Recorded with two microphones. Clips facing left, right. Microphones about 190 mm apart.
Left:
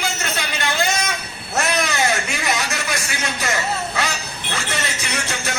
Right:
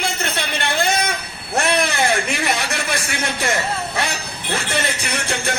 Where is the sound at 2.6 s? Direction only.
30° right (ahead or behind).